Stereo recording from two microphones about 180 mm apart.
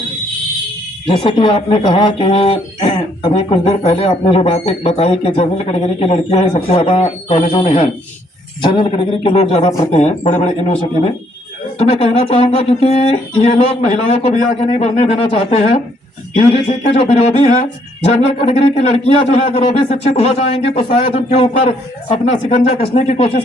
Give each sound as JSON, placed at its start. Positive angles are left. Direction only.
{"t": 1.0, "sound": "speech", "side_deg": 30}